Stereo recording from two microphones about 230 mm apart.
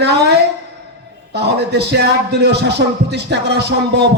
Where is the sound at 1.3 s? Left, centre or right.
Right.